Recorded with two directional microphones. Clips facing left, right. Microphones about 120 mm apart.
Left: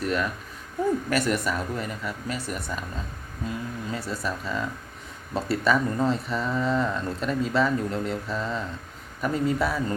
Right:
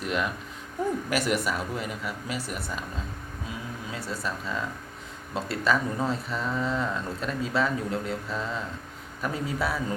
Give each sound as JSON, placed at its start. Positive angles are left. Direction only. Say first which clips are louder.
{"t": 0.0, "sound": "speech", "louder": "left 2 dB", "side_deg": -15}